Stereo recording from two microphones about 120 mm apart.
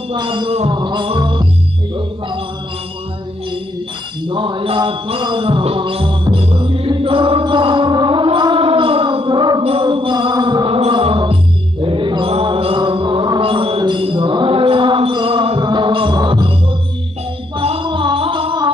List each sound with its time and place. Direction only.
0.1 s a sound: 40° right (ahead or behind)
0.7 s music: 40° right (ahead or behind)
4.3 s music: 45° right (ahead or behind)
9.6 s music: 50° right (ahead or behind)
10.8 s music: 50° right (ahead or behind)
11.8 s mantra: 45° right (ahead or behind)
17.6 s music: 50° right (ahead or behind)